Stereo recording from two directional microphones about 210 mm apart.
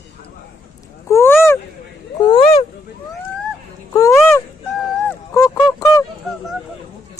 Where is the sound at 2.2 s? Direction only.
25° left (ahead or behind).